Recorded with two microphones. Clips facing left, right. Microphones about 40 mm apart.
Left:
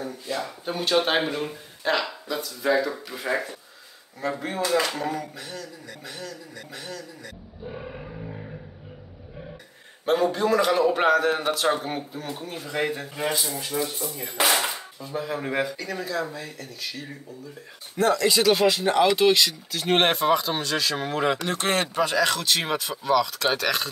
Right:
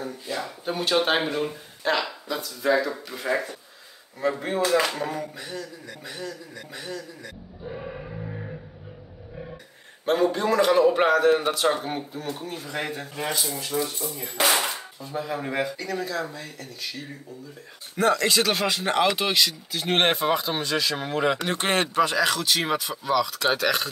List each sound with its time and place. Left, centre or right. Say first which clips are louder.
0.0 s a man's voice: left 1 dB; centre
10.0 s a man's voice: even; centre
21.4 s speech: right 1 dB; centre
21.9 s a man's voice: right 1 dB; centre